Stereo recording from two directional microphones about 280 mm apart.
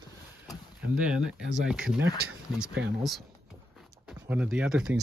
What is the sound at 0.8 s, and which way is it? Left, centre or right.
Speech, centre.